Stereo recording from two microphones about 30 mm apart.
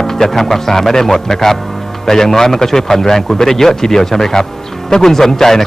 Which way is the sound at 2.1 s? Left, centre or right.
Centre.